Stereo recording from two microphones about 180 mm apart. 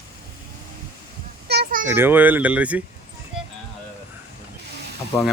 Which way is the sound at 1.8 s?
15° right (ahead or behind).